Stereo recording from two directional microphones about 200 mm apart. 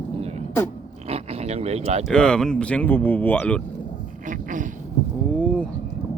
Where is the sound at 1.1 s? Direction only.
30° right (ahead or behind).